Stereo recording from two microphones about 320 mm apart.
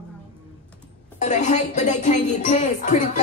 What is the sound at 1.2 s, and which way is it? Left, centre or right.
Music, left.